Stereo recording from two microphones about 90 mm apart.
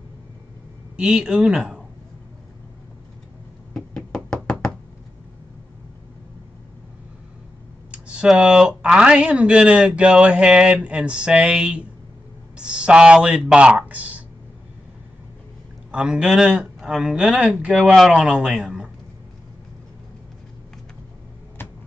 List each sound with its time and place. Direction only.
0.9 s speech: 10° right (ahead or behind)
3.7 s knock: 5° left (ahead or behind)
7.9 s speech: 10° right (ahead or behind)
15.9 s speech: 10° right (ahead or behind)
21.6 s a sound: 25° left (ahead or behind)